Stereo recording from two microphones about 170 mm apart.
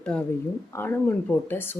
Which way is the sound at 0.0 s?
5° left (ahead or behind).